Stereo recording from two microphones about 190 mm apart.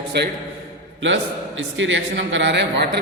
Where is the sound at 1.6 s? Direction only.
75° right (ahead or behind).